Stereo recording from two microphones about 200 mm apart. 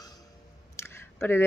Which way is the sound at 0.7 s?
10° left (ahead or behind).